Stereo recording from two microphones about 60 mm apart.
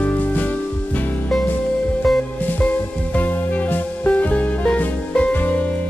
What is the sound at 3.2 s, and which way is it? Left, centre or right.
Music, left.